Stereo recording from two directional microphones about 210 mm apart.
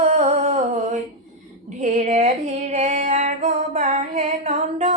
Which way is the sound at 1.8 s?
35° right (ahead or behind).